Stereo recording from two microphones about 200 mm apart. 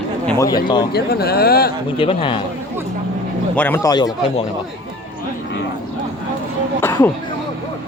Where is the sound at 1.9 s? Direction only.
25° left (ahead or behind).